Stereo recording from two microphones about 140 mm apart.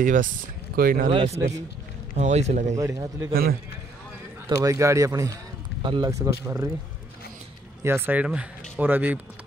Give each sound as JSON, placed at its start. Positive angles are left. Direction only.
{"t": 0.0, "sound": "speech", "side_deg": -70}
{"t": 0.7, "sound": "speech", "side_deg": -90}
{"t": 1.3, "sound": "speech", "side_deg": -25}
{"t": 2.1, "sound": "a man's voice", "side_deg": -55}
{"t": 2.7, "sound": "speech", "side_deg": -25}
{"t": 4.5, "sound": "speech", "side_deg": -25}
{"t": 5.8, "sound": "speech", "side_deg": -35}
{"t": 6.1, "sound": "speech", "side_deg": -20}
{"t": 7.8, "sound": "speech", "side_deg": -15}